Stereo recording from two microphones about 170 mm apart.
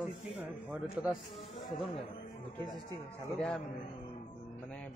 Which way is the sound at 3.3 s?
5° left (ahead or behind).